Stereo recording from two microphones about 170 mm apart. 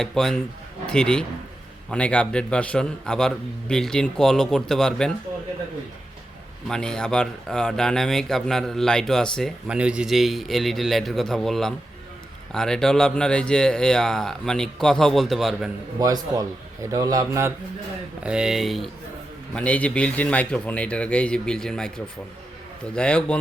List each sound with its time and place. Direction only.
0.0 s a man's voice: centre (ahead or behind)
6.7 s speech: 5° left (ahead or behind)
16.0 s a man's voice: 20° right (ahead or behind)
18.2 s speech: 5° right (ahead or behind)